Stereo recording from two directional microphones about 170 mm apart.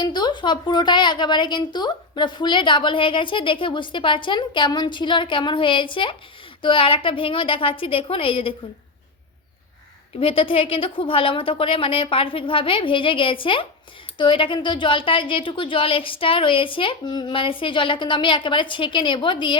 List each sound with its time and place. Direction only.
0.0 s a woman's voice: 25° left (ahead or behind)
10.2 s a woman's voice: 35° left (ahead or behind)